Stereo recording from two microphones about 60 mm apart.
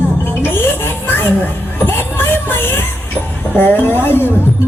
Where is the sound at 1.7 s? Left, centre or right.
Left.